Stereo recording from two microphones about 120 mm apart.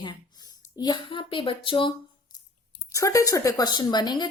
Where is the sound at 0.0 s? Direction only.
35° left (ahead or behind).